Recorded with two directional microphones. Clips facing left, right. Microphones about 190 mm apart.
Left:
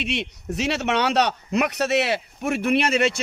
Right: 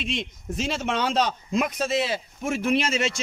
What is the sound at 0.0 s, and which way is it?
Speech, 70° left (ahead or behind).